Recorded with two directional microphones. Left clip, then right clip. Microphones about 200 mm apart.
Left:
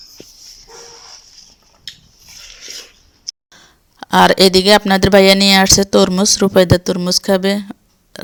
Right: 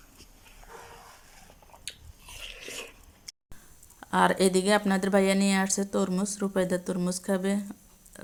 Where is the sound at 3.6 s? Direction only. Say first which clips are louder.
Left 15 dB; 55° left (ahead or behind).